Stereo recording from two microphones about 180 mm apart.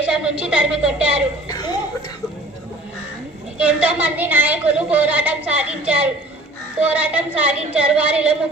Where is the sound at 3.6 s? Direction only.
10° right (ahead or behind).